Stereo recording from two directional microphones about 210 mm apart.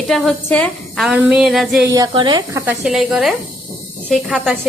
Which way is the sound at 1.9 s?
20° right (ahead or behind).